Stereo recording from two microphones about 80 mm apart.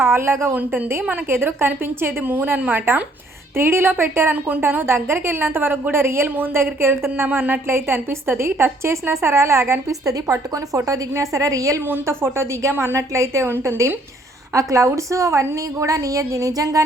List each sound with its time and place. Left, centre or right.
0.0 s a woman's voice: right
11.9 s a woman's voice: right